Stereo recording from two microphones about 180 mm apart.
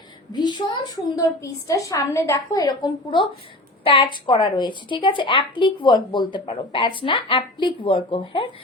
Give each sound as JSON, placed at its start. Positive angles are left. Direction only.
{"t": 0.3, "sound": "a woman's voice", "side_deg": 25}